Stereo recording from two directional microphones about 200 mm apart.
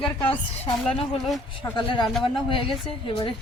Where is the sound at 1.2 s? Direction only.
Centre (ahead or behind).